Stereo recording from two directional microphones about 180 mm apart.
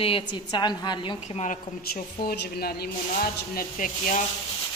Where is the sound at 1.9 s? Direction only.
55° left (ahead or behind).